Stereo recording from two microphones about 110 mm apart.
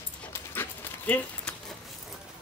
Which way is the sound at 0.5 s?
20° left (ahead or behind).